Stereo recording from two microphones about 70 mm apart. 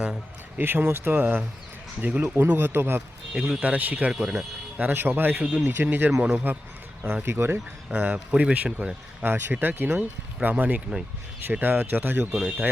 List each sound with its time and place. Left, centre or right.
0.0 s a sound: centre
0.6 s speech: right
3.3 s speech: centre
3.6 s speech: right
4.1 s speech: centre
4.8 s speech: right
6.1 s speech: centre
7.0 s speech: right
7.9 s speech: centre